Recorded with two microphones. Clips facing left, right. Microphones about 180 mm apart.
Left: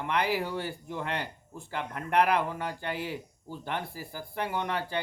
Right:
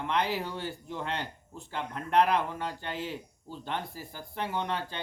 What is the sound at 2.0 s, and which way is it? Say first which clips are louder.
Speech: right 1 dB; 65° left (ahead or behind).